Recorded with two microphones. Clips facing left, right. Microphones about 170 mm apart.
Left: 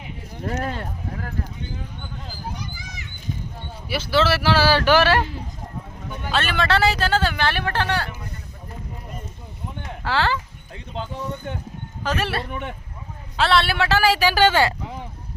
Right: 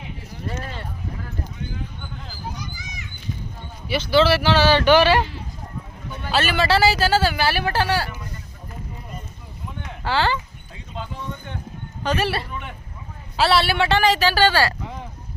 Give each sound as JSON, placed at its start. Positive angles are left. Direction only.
{"t": 0.4, "sound": "speech", "side_deg": 65}
{"t": 3.8, "sound": "speech", "side_deg": 5}
{"t": 6.3, "sound": "speech", "side_deg": -5}
{"t": 10.0, "sound": "speech", "side_deg": 0}
{"t": 12.0, "sound": "speech", "side_deg": 0}